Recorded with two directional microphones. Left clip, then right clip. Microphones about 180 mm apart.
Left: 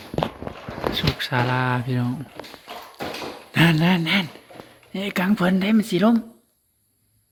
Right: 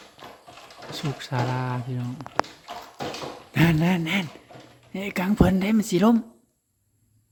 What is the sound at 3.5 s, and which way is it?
Speech, 10° right (ahead or behind).